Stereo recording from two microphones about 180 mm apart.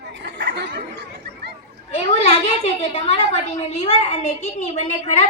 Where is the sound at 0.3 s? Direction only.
70° right (ahead or behind).